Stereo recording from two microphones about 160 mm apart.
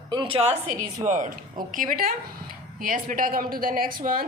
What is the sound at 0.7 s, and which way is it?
A woman's voice, 50° right (ahead or behind).